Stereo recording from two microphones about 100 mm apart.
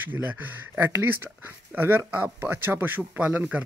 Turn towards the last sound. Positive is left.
turn(degrees=-15)  # may be behind; listen again after turning